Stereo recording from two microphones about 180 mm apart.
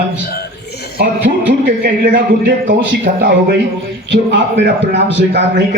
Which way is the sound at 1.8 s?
50° right (ahead or behind).